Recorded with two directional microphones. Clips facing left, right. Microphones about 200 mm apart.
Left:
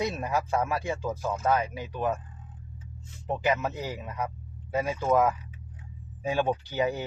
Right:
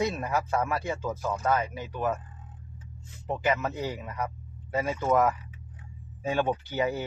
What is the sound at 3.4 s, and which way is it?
Speech, 10° left (ahead or behind).